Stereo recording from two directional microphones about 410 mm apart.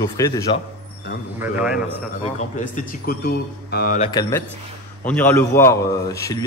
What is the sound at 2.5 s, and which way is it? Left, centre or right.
A man's voice, centre.